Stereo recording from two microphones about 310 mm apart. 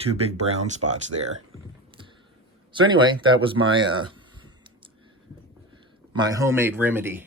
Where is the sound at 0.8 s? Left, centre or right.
Right.